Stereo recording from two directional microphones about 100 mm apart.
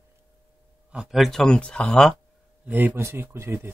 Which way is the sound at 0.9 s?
5° right (ahead or behind).